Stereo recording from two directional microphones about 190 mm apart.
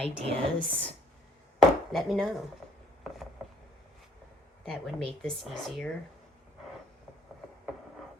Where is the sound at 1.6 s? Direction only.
Centre (ahead or behind).